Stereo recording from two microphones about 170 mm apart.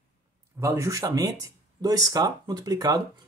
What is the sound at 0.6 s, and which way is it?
Speech, 15° right (ahead or behind).